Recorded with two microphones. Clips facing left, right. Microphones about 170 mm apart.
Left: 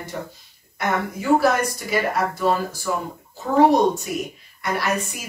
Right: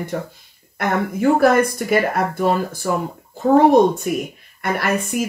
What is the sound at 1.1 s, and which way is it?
Speech, 55° right (ahead or behind).